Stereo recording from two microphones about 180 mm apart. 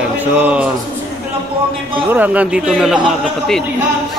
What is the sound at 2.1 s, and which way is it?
Speech, 10° right (ahead or behind).